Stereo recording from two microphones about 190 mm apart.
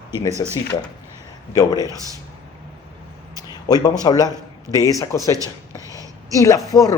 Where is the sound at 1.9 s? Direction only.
20° right (ahead or behind).